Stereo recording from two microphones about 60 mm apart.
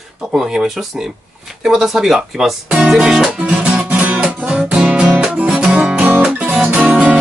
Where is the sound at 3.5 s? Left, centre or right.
Right.